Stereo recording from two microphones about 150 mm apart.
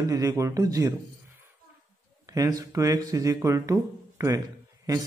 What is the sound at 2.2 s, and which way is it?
Speech, 25° right (ahead or behind).